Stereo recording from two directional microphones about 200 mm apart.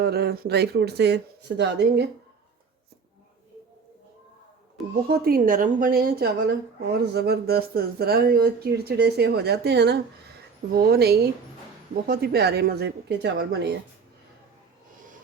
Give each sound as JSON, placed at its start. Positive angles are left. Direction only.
{"t": 0.0, "sound": "speech", "side_deg": -50}
{"t": 5.0, "sound": "speech", "side_deg": -50}